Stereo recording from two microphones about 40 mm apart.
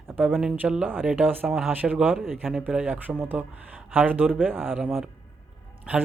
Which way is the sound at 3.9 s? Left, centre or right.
Right.